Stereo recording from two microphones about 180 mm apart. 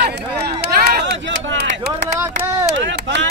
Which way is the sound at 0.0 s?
65° right (ahead or behind).